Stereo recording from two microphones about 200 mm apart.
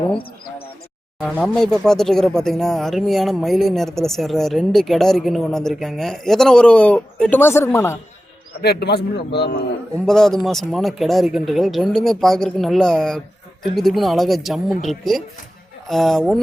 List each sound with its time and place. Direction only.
1.2 s speech: centre (ahead or behind)
8.6 s speech: 55° left (ahead or behind)
10.1 s speech: centre (ahead or behind)